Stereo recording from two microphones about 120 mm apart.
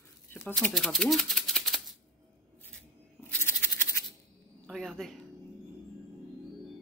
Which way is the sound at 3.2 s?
15° left (ahead or behind).